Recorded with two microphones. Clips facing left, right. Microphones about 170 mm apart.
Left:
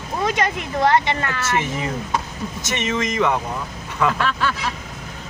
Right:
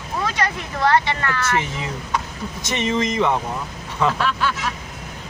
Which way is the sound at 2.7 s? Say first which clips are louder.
Right 2 dB; 20° right (ahead or behind).